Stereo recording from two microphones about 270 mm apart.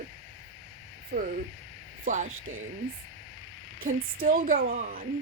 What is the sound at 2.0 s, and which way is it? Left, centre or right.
Speech, right.